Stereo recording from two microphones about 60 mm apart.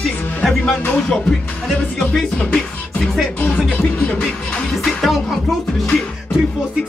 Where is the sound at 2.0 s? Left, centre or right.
Centre.